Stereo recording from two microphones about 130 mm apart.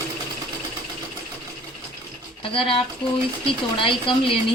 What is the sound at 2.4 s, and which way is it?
A woman's voice, 45° left (ahead or behind).